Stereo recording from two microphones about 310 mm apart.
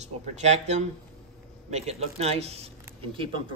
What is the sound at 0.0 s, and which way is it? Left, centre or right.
Speech, right.